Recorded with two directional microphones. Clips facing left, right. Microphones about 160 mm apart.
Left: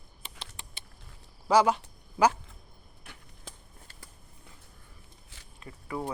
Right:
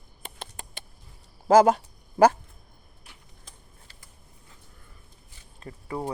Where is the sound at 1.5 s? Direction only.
45° right (ahead or behind).